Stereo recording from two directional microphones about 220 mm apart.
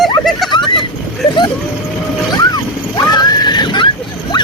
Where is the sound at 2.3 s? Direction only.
15° left (ahead or behind).